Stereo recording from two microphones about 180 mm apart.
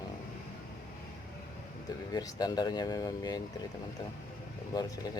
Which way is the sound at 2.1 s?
20° left (ahead or behind).